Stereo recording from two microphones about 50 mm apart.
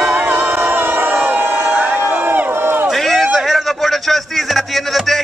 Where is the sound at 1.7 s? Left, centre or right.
Right.